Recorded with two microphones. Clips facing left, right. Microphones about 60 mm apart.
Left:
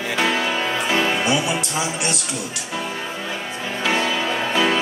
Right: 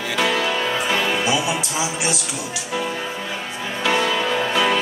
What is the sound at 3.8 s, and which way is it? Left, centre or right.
Music, centre.